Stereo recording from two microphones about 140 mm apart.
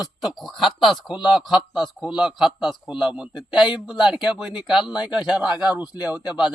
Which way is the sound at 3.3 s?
35° left (ahead or behind).